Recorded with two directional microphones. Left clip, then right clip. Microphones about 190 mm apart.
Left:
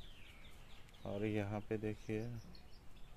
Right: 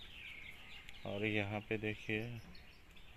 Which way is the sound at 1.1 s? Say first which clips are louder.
Right 3 dB; 5° left (ahead or behind).